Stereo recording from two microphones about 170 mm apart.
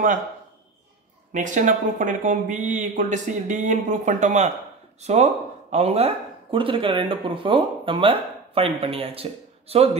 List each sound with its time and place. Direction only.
1.3 s speech: 45° right (ahead or behind)